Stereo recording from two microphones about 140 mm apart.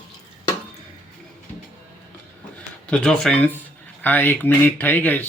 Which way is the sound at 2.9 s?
5° left (ahead or behind).